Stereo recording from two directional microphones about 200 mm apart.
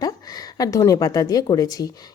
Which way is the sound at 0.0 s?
20° left (ahead or behind).